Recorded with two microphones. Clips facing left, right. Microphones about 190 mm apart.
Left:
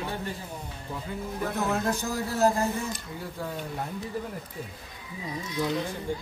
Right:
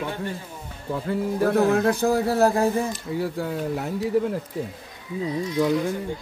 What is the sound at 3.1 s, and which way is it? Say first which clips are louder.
Speech: right 9 dB; 75° right (ahead or behind).